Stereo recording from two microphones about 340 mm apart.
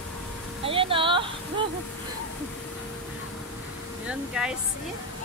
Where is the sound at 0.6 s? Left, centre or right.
Centre.